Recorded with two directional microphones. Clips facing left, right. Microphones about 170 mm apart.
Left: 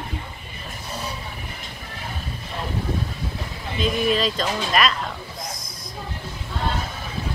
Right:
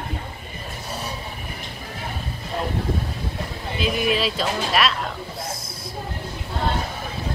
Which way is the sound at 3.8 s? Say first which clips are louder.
Left 1 dB; 5° right (ahead or behind).